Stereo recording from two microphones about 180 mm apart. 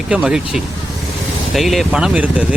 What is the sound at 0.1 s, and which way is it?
Speech, 5° right (ahead or behind).